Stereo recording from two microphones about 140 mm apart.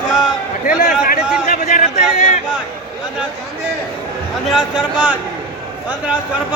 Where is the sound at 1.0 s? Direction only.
75° left (ahead or behind); by 2.4 s 60° left (ahead or behind).